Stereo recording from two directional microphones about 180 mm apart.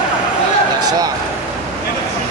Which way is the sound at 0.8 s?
20° right (ahead or behind).